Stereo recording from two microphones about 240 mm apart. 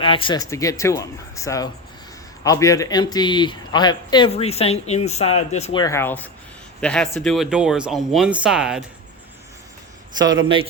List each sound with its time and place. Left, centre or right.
0.0 s speech: left
5.8 s speech: centre